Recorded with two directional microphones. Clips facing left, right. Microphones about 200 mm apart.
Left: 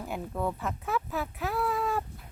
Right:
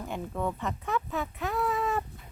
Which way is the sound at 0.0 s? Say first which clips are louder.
Even; 5° left (ahead or behind).